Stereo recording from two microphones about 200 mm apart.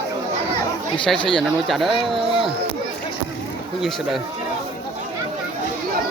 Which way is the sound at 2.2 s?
25° right (ahead or behind).